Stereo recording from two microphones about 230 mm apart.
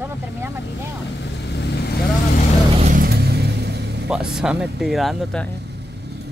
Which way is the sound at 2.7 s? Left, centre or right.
Right.